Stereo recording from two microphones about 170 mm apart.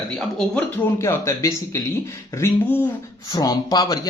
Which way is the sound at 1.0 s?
20° left (ahead or behind).